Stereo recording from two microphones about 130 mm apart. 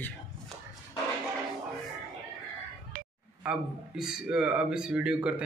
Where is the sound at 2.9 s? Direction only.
90° right.